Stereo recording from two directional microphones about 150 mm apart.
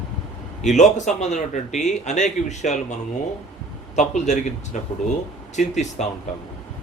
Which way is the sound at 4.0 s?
50° left (ahead or behind).